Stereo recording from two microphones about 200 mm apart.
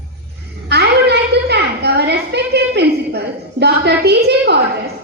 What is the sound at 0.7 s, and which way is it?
A woman's voice, 55° right (ahead or behind).